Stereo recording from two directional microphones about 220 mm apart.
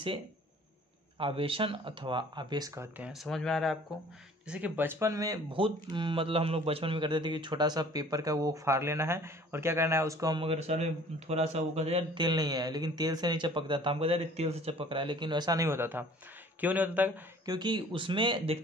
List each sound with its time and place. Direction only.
1.1 s speech: 25° right (ahead or behind); by 17.2 s 5° right (ahead or behind)
17.5 s speech: 20° right (ahead or behind)